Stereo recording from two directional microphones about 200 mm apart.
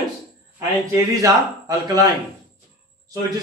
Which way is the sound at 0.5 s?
15° right (ahead or behind).